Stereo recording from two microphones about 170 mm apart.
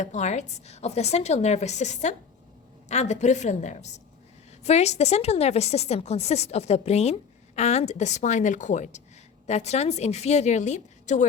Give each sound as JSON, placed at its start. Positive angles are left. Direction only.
{"t": 0.0, "sound": "a woman's voice", "side_deg": 45}